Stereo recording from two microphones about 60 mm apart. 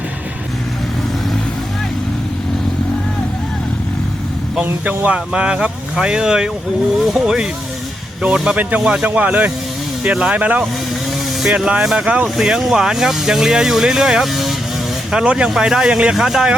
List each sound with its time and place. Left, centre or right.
4.6 s speech: right
11.3 s speech: centre
15.1 s speech: centre